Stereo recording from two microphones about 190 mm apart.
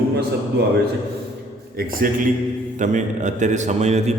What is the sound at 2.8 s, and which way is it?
A man's voice, 40° right (ahead or behind).